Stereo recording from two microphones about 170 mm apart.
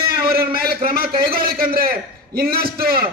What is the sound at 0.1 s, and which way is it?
A man's voice, 60° right (ahead or behind).